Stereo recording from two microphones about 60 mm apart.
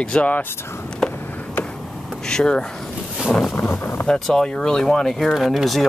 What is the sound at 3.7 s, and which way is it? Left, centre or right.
Speech, left.